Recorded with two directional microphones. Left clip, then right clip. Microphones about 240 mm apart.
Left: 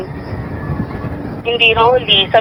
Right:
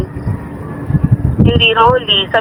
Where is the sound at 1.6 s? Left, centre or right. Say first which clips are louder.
Even; right.